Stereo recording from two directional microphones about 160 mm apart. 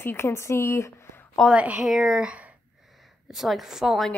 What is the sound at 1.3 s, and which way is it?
A woman's voice, 5° right (ahead or behind).